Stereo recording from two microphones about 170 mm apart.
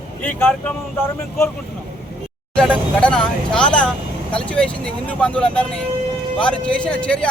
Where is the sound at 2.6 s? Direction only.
5° left (ahead or behind).